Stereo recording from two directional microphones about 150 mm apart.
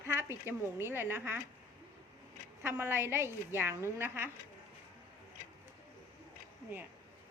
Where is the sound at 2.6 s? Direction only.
15° right (ahead or behind).